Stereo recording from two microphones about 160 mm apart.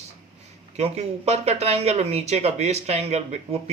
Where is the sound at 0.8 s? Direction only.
40° right (ahead or behind).